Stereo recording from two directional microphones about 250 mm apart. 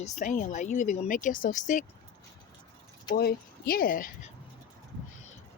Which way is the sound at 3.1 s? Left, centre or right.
Left.